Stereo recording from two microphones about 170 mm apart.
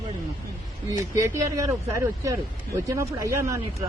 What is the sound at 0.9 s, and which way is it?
Speech, 20° right (ahead or behind).